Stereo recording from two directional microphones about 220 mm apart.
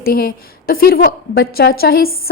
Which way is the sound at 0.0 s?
45° left (ahead or behind).